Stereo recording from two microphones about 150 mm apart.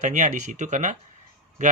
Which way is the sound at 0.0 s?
55° right (ahead or behind).